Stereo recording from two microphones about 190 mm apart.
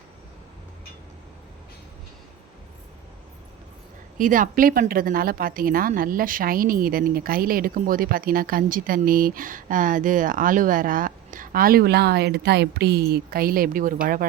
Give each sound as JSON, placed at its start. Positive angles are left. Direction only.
{"t": 4.2, "sound": "speech", "side_deg": -45}